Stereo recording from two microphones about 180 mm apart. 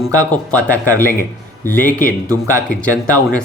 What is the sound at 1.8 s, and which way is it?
Speech, 50° left (ahead or behind).